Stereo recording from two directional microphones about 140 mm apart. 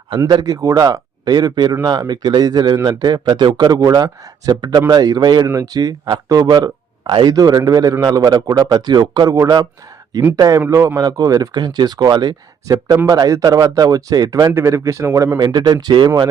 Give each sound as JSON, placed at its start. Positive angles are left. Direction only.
{"t": 0.3, "sound": "speech", "side_deg": -30}
{"t": 14.5, "sound": "speech", "side_deg": -20}